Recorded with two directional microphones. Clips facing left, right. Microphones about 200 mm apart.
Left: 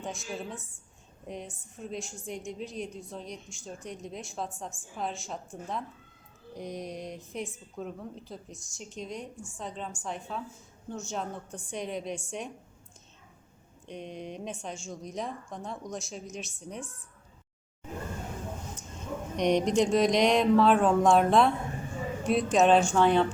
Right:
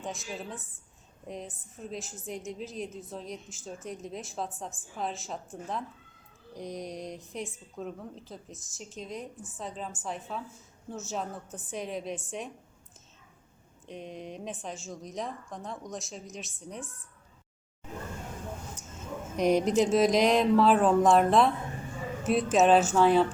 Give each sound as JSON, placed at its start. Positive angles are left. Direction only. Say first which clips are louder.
{"t": 0.0, "sound": "a woman's voice", "louder": "left 1 dB", "side_deg": 0}
{"t": 13.8, "sound": "a woman's voice", "louder": "left 1 dB", "side_deg": 0}
{"t": 19.4, "sound": "a woman's voice", "louder": "right 1 dB", "side_deg": -5}